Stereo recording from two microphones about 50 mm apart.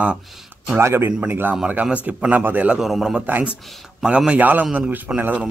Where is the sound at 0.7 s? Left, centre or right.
Right.